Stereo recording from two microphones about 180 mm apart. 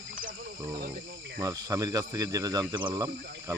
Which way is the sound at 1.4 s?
20° right (ahead or behind).